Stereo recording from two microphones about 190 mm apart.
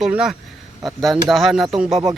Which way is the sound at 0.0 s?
5° right (ahead or behind).